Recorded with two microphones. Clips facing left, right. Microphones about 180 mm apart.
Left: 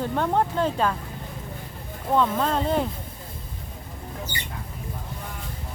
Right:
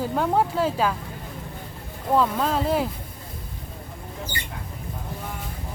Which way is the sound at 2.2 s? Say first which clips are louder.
Even; 5° right (ahead or behind).